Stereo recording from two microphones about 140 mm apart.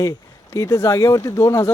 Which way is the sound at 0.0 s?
25° left (ahead or behind).